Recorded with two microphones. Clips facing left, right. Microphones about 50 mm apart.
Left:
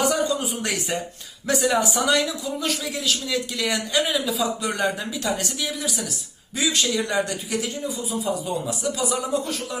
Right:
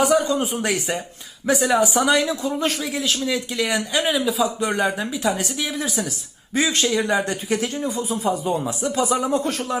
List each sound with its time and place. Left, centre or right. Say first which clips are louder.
0.3 s speech: right 3 dB; right
0.6 s speech: right 3 dB; centre
2.2 s speech: right 4 dB; right
2.8 s a man's voice: right 3 dB; right
7.7 s a man's voice: right 4 dB; right